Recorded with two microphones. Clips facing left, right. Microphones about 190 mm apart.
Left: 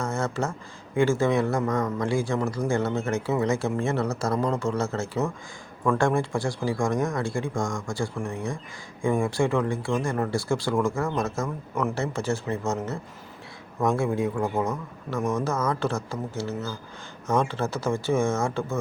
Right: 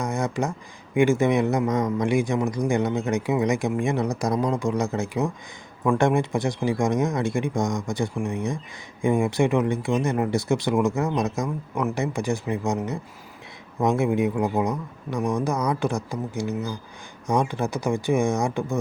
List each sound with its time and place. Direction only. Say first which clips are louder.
0.0 s a man's voice: right 2 dB; 15° right (ahead or behind)